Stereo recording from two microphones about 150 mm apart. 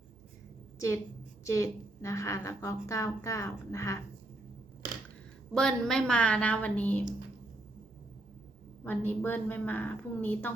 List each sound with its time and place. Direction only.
1.5 s a woman's voice: 20° left (ahead or behind)
5.5 s a woman's voice: 5° left (ahead or behind)
8.8 s a woman's voice: 15° left (ahead or behind)